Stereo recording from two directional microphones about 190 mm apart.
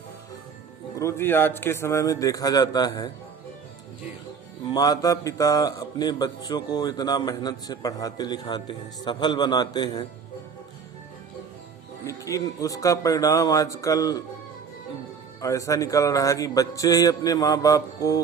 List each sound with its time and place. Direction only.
0.9 s speech: 15° left (ahead or behind)
4.7 s a man's voice: 20° left (ahead or behind)
12.0 s speech: 15° left (ahead or behind)
15.4 s speech: 15° left (ahead or behind)